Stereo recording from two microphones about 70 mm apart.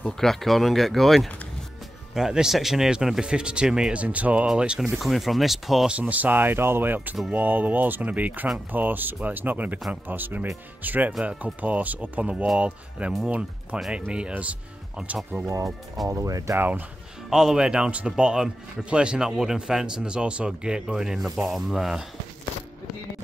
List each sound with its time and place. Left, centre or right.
0.0 s speech: centre
4.5 s speech: centre
5.9 s speech: right
15.4 s speech: right
16.5 s speech: right
17.3 s speech: centre